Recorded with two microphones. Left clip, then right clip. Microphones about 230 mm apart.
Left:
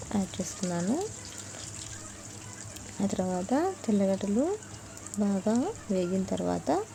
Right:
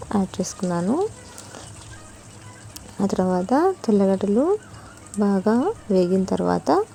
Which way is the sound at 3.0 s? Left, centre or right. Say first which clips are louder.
Right 9 dB; right.